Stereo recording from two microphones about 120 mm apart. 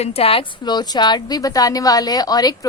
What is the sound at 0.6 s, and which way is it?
A woman's voice, 35° left (ahead or behind).